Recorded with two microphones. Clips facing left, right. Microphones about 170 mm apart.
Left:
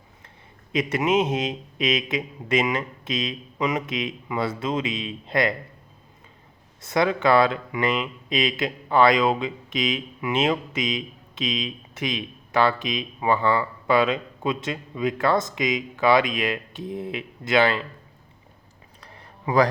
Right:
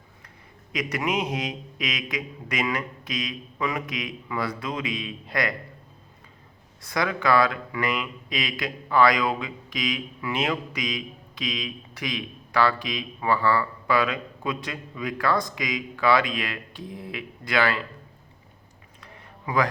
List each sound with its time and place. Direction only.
0.7 s speech: 25° left (ahead or behind)
6.8 s speech: 25° left (ahead or behind)
18.9 s a sound: 35° left (ahead or behind)